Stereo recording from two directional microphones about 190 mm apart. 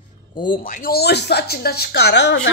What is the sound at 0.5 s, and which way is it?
Speech, 45° left (ahead or behind).